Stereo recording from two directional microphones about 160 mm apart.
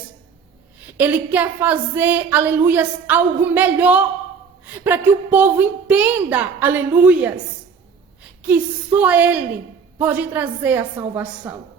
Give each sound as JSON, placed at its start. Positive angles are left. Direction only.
{"t": 0.9, "sound": "a woman's voice", "side_deg": -10}
{"t": 8.4, "sound": "a woman's voice", "side_deg": -10}